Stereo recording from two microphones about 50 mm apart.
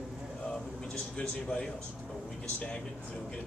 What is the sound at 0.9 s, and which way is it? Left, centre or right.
Speech, centre.